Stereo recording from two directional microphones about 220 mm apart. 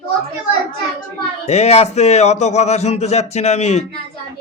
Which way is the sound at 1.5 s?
30° left (ahead or behind).